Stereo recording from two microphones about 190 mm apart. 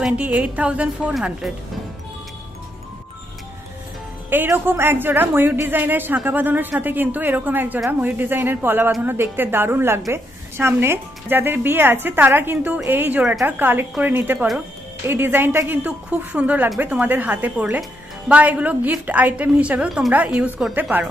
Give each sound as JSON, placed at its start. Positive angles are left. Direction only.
{"t": 0.0, "sound": "a woman's voice", "side_deg": -5}
{"t": 4.3, "sound": "a woman's voice", "side_deg": -10}